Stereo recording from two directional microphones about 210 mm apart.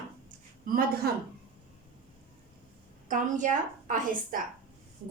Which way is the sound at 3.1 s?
40° right (ahead or behind).